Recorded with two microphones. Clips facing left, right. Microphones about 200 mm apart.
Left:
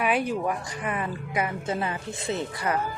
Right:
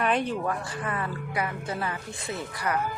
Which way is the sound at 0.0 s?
10° left (ahead or behind).